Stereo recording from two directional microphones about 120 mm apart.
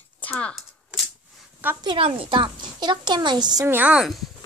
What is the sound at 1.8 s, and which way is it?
A woman's voice, 45° right (ahead or behind).